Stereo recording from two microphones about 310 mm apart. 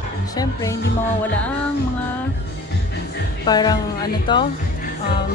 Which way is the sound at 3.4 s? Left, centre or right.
Centre.